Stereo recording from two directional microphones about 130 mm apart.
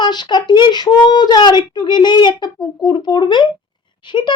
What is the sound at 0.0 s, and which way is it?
Speech, 35° left (ahead or behind).